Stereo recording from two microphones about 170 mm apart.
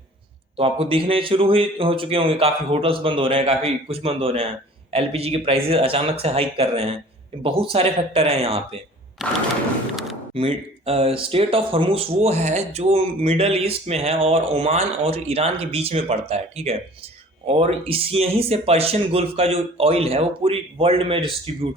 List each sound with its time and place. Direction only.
0.5 s speech: 35° right (ahead or behind)
9.2 s a sound: centre (ahead or behind)
10.3 s speech: 35° right (ahead or behind)